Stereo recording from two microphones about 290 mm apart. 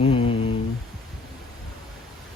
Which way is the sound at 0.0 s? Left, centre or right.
Centre.